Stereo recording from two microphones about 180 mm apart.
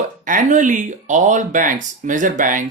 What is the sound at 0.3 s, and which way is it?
Speech, 45° right (ahead or behind).